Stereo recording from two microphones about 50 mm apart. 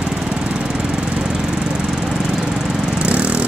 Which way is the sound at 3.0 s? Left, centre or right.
Right.